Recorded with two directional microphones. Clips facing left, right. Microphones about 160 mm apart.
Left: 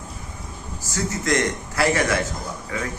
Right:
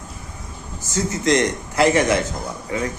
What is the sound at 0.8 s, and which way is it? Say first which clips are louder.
Speech: right 3 dB; 20° right (ahead or behind).